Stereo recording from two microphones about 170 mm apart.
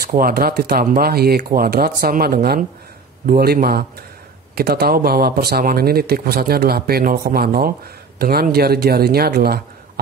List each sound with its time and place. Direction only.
0.2 s speech: 60° right (ahead or behind)